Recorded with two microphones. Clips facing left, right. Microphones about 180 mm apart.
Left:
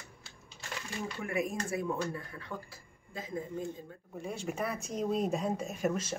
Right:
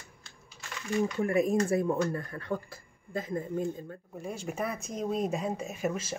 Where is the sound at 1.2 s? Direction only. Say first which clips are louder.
Right 6 dB; 35° right (ahead or behind).